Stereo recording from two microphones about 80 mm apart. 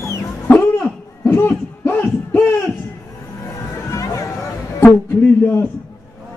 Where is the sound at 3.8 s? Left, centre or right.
Left.